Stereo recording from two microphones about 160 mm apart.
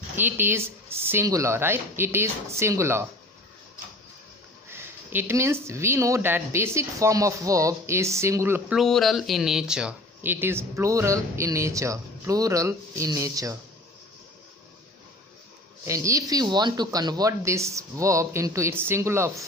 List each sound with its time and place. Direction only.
0.1 s speech: 15° right (ahead or behind)
4.6 s speech: 15° right (ahead or behind)
8.7 s speech: centre (ahead or behind); by 13.6 s 20° right (ahead or behind)
15.8 s speech: 20° right (ahead or behind)